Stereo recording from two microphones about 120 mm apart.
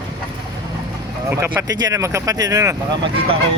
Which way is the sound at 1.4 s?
25° right (ahead or behind).